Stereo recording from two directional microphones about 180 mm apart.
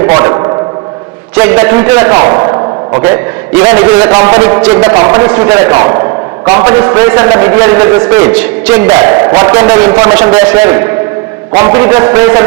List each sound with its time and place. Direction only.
0.1 s a sound: 20° right (ahead or behind)
1.4 s a man's voice: 15° right (ahead or behind)
8.3 s a man's voice: 5° right (ahead or behind)
8.9 s a man's voice: 20° right (ahead or behind)